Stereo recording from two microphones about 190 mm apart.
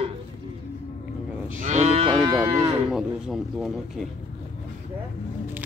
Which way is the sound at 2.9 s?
Centre (ahead or behind).